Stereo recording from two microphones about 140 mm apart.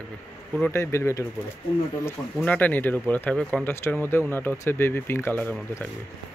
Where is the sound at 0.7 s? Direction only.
20° left (ahead or behind).